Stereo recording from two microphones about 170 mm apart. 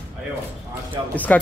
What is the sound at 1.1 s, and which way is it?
Speech, 10° left (ahead or behind).